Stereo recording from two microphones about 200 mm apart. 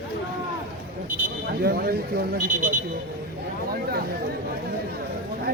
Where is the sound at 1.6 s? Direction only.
50° right (ahead or behind).